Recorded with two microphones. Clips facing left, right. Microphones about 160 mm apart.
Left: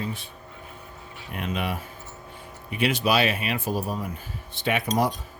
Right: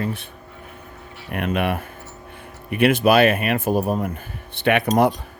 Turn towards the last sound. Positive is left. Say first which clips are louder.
# right 7 dB
turn(degrees=-60)  # may be behind; listen again after turning